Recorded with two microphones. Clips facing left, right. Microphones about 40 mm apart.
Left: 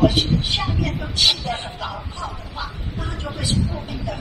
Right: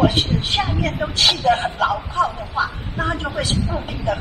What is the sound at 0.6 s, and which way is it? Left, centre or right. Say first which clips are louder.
Speech: right 4 dB; right.